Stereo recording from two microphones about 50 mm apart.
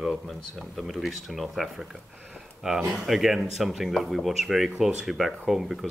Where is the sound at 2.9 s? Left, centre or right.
Centre.